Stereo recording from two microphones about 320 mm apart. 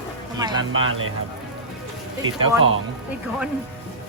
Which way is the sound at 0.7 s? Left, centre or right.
Right.